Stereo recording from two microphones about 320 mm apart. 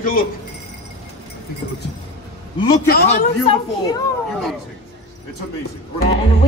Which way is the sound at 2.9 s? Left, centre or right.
Left.